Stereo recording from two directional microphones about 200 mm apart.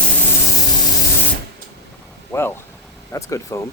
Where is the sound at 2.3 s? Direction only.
15° left (ahead or behind).